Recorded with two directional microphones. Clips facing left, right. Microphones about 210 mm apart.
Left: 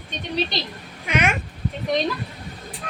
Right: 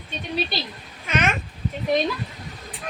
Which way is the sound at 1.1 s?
10° left (ahead or behind).